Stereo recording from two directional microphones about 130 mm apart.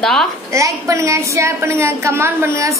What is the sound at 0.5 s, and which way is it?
A woman's voice, 25° right (ahead or behind).